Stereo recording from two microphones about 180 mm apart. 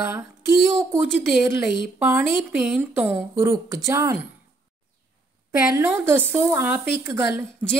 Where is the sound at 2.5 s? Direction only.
5° right (ahead or behind).